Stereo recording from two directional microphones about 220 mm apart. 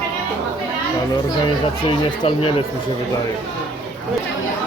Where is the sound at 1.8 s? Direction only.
25° left (ahead or behind).